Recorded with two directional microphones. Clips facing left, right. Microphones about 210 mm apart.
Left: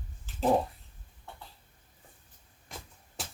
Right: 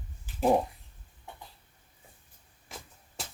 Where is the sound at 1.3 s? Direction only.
15° right (ahead or behind).